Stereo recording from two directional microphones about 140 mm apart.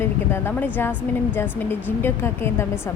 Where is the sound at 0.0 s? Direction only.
15° left (ahead or behind).